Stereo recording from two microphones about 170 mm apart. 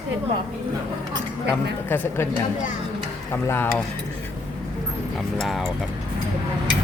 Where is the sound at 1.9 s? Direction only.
15° left (ahead or behind).